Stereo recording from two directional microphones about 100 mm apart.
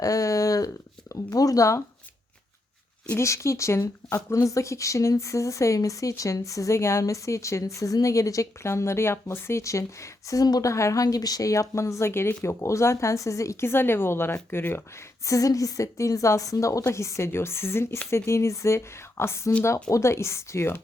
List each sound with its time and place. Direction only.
0.0 s a sound: 35° left (ahead or behind)
1.1 s speech: 35° left (ahead or behind)
3.2 s a woman's voice: 30° left (ahead or behind)
15.3 s a woman's voice: 35° left (ahead or behind)